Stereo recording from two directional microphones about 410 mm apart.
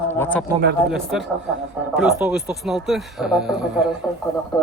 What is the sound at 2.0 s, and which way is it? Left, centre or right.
Speech, centre.